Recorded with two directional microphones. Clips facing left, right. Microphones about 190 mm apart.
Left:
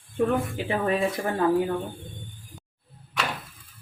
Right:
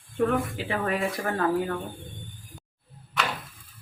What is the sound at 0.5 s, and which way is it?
Speech, 20° left (ahead or behind).